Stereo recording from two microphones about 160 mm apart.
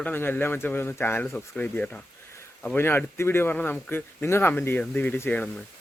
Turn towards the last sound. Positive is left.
turn(degrees=10)  # may be behind; listen again after turning